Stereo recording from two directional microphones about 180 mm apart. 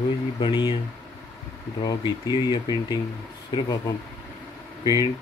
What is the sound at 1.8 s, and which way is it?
Speech, 25° left (ahead or behind).